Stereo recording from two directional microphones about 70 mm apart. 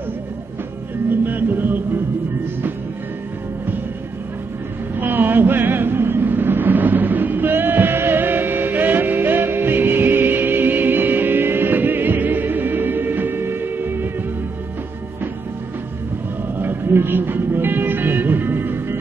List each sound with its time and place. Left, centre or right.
1.2 s music: right
4.9 s vehicle: right
16.5 s music: right